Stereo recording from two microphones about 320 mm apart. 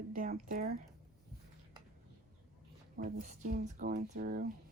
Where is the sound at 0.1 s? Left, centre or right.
Right.